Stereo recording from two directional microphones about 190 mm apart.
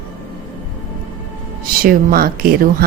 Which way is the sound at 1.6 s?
50° right (ahead or behind).